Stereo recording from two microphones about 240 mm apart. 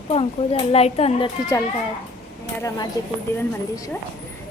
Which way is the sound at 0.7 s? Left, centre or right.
Left.